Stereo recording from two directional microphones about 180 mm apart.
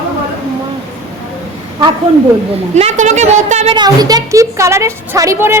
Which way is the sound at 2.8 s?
40° right (ahead or behind).